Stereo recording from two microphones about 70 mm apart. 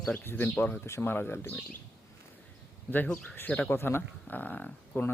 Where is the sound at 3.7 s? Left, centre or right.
Left.